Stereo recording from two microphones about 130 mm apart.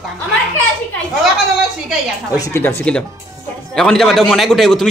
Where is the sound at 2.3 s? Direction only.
20° left (ahead or behind).